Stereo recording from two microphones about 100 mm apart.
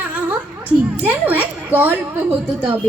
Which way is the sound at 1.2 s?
15° right (ahead or behind).